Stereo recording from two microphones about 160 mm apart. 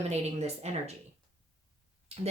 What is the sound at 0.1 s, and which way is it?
Speech, 45° right (ahead or behind).